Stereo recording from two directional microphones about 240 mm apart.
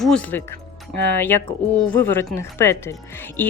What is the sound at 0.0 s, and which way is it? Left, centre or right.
A woman's voice, centre.